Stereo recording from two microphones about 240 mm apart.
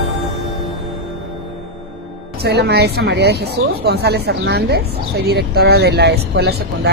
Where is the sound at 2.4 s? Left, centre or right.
Right.